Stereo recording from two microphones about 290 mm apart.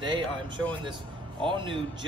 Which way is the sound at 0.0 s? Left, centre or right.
Centre.